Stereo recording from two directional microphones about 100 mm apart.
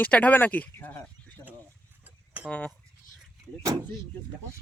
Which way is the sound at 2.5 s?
15° left (ahead or behind).